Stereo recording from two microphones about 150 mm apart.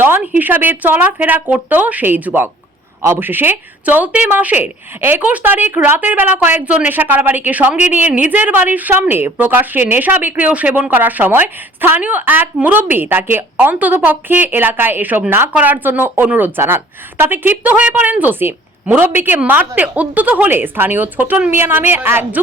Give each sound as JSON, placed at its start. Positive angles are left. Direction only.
{"t": 0.0, "sound": "speech", "side_deg": -15}